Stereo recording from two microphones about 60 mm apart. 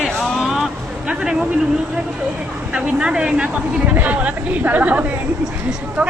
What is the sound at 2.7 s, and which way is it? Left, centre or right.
Speech, centre.